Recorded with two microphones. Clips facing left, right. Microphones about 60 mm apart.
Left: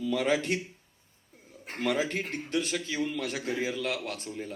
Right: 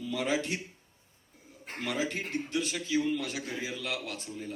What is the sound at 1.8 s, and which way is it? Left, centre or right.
A man's voice, left.